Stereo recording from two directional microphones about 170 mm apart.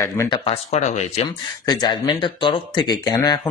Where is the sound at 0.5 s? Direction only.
40° left (ahead or behind).